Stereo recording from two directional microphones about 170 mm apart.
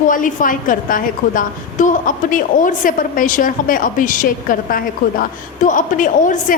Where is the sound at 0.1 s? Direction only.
50° left (ahead or behind).